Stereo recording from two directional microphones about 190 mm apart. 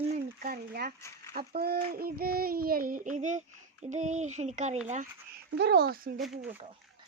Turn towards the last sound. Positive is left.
turn(degrees=0)  # may be behind; listen again after turning